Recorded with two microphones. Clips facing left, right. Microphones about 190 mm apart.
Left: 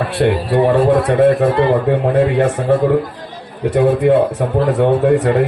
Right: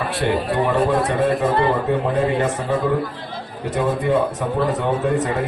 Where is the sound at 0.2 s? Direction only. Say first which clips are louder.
Left 7 dB; 50° left (ahead or behind).